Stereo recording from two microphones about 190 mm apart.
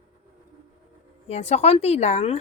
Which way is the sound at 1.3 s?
35° left (ahead or behind).